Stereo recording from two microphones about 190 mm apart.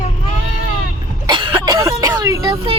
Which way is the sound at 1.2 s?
20° right (ahead or behind).